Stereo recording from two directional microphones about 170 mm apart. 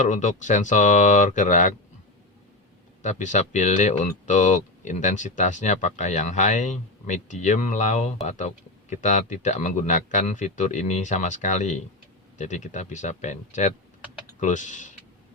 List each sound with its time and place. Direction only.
0.0 s speech: 45° left (ahead or behind)
3.0 s speech: 45° left (ahead or behind)